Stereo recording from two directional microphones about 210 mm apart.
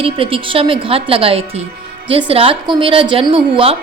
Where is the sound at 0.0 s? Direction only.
25° right (ahead or behind).